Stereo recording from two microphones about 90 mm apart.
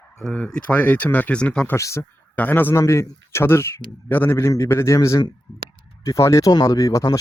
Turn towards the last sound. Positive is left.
turn(degrees=40)  # may be behind; listen again after turning